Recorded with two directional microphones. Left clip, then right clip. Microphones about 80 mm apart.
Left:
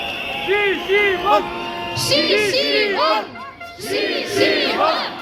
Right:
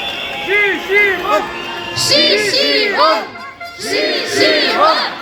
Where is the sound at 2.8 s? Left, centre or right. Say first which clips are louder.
Right 5 dB; right.